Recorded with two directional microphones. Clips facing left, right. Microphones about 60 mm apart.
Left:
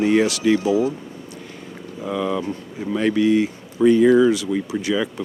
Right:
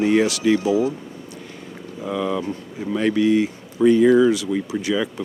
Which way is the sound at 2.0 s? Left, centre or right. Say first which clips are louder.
Even; left.